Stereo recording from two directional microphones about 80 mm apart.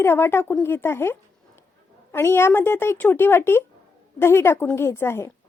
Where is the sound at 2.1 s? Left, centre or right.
Left.